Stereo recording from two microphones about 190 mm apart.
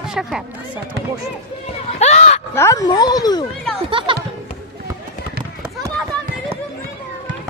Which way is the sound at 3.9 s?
25° right (ahead or behind).